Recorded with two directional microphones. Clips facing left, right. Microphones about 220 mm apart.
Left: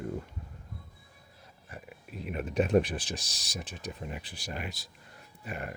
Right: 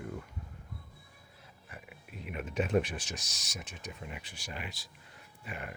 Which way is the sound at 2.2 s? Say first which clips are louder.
Left 5 dB; 40° left (ahead or behind).